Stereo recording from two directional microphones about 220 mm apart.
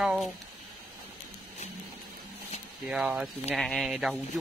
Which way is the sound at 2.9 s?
5° right (ahead or behind).